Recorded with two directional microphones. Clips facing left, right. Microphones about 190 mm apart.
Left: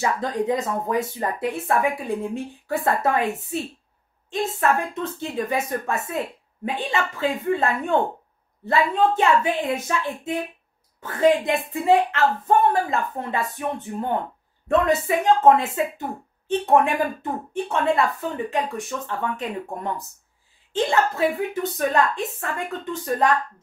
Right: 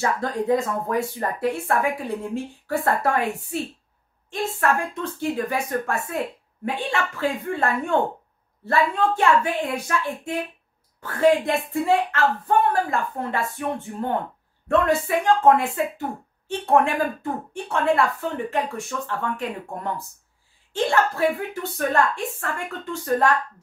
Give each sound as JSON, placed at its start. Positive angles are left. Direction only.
{"t": 0.2, "sound": "speech", "side_deg": 20}